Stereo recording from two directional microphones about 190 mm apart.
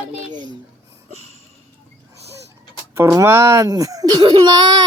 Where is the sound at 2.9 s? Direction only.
15° right (ahead or behind).